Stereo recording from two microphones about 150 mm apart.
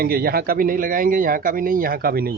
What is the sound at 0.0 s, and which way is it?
Speech, 90° right.